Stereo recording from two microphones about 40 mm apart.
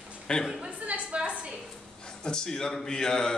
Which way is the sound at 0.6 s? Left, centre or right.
Right.